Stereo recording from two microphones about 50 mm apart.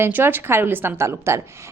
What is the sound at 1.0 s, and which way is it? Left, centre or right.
Speech, right.